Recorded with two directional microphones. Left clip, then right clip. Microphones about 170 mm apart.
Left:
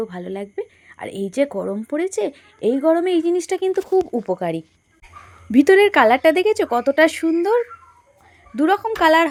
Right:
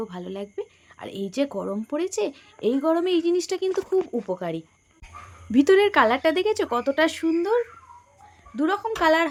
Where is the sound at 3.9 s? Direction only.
35° left (ahead or behind).